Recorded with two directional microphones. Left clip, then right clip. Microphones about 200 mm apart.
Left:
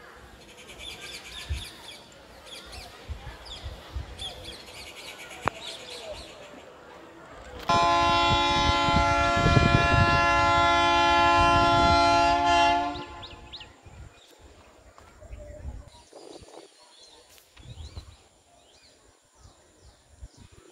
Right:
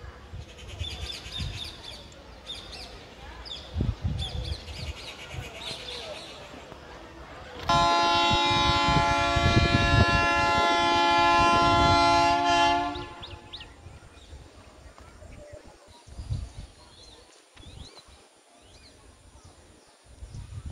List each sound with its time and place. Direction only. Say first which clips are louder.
7.6 s civil defense siren: even; centre (ahead or behind)
13.2 s music: even; 60° left (ahead or behind)